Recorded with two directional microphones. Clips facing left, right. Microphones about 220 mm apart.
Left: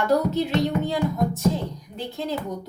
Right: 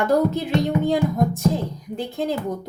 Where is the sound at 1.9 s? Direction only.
50° right (ahead or behind).